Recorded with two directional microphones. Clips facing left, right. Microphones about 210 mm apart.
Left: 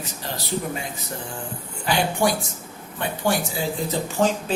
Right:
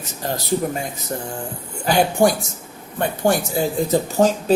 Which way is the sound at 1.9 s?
40° right (ahead or behind).